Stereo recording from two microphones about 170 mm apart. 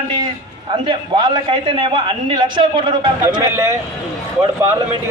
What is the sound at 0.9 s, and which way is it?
A man's voice, 25° right (ahead or behind).